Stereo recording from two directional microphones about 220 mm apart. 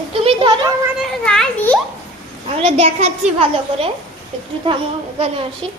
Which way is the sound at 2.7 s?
30° right (ahead or behind).